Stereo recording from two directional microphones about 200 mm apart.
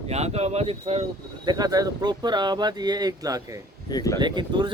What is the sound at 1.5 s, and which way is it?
Speech, 20° right (ahead or behind).